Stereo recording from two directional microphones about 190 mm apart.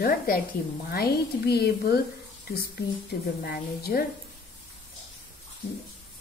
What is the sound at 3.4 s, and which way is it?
Speech, 55° left (ahead or behind).